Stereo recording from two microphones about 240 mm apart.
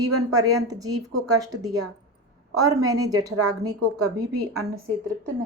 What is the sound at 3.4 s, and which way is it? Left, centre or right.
Speech, right.